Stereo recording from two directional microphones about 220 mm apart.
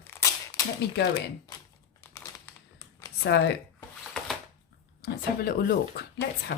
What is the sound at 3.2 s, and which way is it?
Speech, 50° left (ahead or behind).